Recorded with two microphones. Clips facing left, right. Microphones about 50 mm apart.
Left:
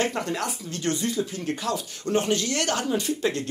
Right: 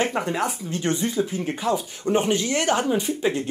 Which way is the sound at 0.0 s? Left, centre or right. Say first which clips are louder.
Right 3 dB; centre.